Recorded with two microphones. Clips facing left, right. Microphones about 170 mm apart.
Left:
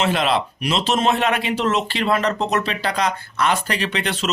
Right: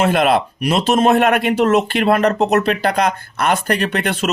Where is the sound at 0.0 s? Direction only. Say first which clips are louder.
Right 5 dB; 55° right (ahead or behind).